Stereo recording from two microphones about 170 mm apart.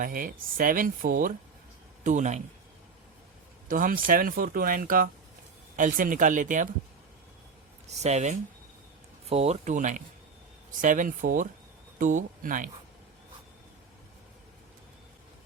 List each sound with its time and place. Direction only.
0.0 s speech: 55° right (ahead or behind)
3.7 s speech: 55° right (ahead or behind)
7.9 s speech: 40° right (ahead or behind)